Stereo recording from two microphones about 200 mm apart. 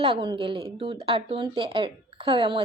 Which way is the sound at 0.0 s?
25° right (ahead or behind).